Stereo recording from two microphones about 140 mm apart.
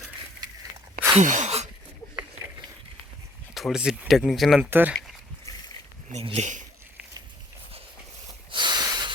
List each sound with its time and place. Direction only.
1.2 s a sound: 60° right (ahead or behind)
3.5 s speech: 5° right (ahead or behind)
4.7 s speech: 15° right (ahead or behind)
6.1 s speech: 50° right (ahead or behind)
8.4 s snort: 35° right (ahead or behind)